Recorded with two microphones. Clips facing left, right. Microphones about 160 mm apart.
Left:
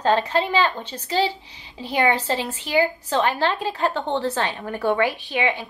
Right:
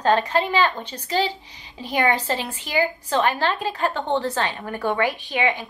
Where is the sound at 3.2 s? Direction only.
15° left (ahead or behind).